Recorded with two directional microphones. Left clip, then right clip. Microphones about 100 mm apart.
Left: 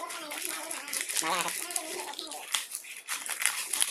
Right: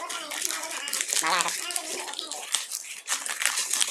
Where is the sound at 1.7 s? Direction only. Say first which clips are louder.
Right 4 dB; 25° right (ahead or behind).